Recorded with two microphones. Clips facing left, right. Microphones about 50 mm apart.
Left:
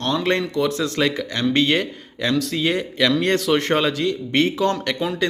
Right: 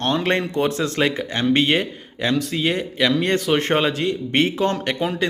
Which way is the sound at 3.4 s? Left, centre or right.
Right.